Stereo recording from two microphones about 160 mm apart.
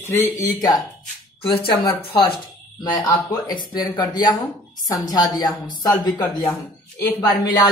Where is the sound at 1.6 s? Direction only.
35° left (ahead or behind).